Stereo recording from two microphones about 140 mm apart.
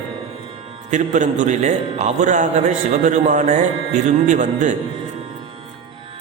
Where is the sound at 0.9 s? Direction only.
60° right (ahead or behind).